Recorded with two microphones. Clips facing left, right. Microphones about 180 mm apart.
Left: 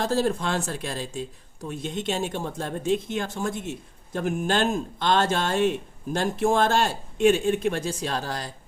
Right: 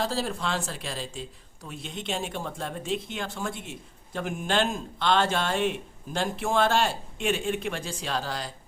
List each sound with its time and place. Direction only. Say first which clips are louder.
0.0 s speech: left 5 dB; 45° left (ahead or behind)